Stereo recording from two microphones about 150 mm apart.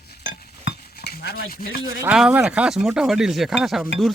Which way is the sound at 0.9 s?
90° left.